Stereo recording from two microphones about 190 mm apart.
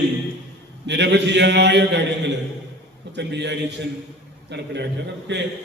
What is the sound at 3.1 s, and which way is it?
A man's voice, 65° right (ahead or behind).